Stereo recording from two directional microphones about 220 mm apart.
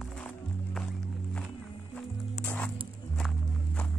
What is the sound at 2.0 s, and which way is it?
Music, 5° left (ahead or behind).